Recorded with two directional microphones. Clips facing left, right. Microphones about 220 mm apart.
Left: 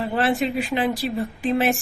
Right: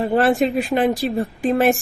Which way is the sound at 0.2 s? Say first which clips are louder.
Right 3 dB; 45° right (ahead or behind).